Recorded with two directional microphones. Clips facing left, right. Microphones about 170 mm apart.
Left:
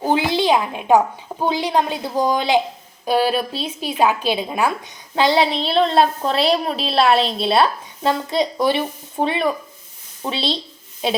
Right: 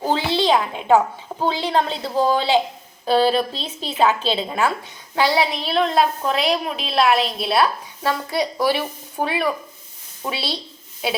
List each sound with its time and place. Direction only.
0.0 s a woman's voice: 15° left (ahead or behind)